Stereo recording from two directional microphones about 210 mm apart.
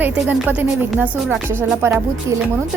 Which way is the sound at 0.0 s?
10° right (ahead or behind).